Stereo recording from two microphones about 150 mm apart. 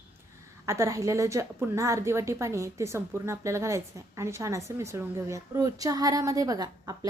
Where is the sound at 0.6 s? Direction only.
20° right (ahead or behind).